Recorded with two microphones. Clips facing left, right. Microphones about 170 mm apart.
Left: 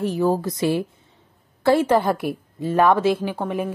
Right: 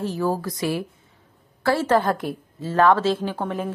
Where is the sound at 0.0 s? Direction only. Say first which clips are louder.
Left 4 dB; 20° left (ahead or behind).